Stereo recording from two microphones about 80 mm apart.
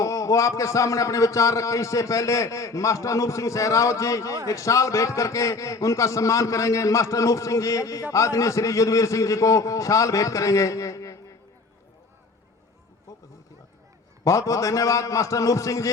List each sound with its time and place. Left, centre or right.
0.0 s a man's voice: left
13.1 s a sound: left
14.3 s a man's voice: left